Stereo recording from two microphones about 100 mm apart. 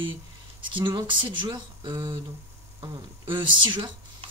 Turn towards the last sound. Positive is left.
turn(degrees=-50)  # may be behind; listen again after turning